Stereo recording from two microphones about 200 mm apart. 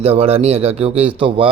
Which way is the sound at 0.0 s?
30° right (ahead or behind).